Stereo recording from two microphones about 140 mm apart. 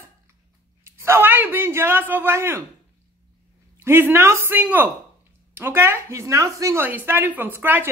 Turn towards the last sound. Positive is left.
turn(degrees=-15)  # may be behind; listen again after turning